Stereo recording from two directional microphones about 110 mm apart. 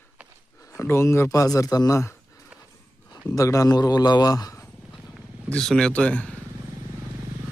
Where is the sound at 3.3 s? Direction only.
30° left (ahead or behind).